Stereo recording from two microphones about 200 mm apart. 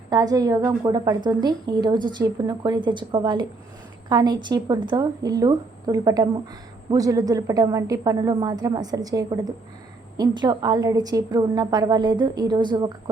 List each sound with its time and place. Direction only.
0.1 s a woman's voice: 20° right (ahead or behind)